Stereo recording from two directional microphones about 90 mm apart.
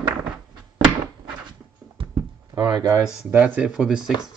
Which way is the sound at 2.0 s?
70° right (ahead or behind).